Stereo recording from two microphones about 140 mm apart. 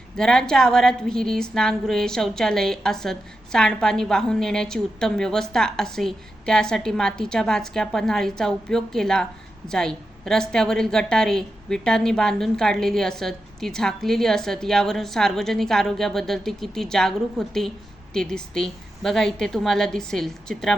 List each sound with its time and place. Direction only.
0.2 s a woman's voice: 5° left (ahead or behind)